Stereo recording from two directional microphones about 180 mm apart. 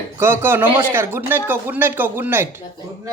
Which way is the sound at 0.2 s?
15° right (ahead or behind).